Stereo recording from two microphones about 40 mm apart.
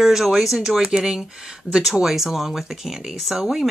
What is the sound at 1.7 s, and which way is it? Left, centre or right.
Speech, right.